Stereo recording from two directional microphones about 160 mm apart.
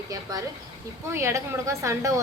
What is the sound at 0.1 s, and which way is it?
A woman's voice, 20° right (ahead or behind).